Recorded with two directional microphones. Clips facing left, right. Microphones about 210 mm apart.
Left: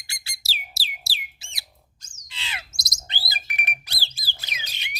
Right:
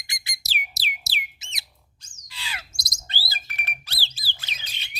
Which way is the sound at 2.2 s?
25° left (ahead or behind).